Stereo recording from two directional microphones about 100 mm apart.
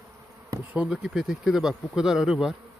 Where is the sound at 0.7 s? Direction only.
10° right (ahead or behind).